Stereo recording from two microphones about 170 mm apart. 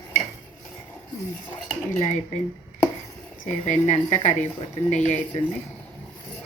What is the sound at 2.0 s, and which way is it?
Speech, 40° left (ahead or behind).